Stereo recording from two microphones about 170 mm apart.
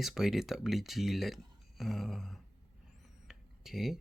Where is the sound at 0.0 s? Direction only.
Centre (ahead or behind).